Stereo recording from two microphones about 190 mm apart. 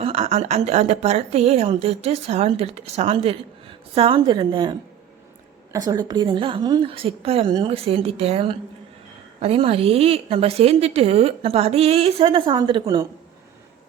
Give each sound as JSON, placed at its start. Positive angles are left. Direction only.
{"t": 0.0, "sound": "a woman's voice", "side_deg": -30}